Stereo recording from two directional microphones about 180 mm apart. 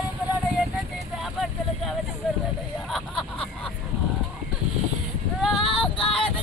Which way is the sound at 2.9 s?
5° left (ahead or behind).